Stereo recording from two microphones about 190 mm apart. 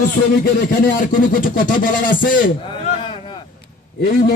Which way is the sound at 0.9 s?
45° left (ahead or behind).